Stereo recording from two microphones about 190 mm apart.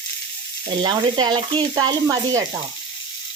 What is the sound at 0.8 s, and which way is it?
Speech, 25° right (ahead or behind).